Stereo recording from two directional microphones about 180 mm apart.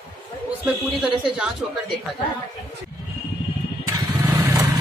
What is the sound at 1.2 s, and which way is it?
Speech, centre (ahead or behind).